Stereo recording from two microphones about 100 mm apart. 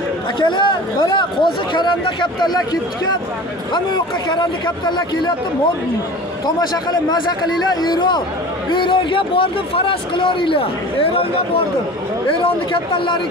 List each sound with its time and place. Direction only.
0.4 s speech: 55° left (ahead or behind)
6.4 s speech: 45° left (ahead or behind)